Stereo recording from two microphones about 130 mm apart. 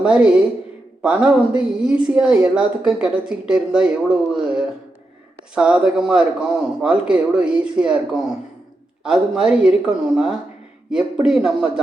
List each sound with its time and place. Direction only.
0.0 s speech: 5° right (ahead or behind)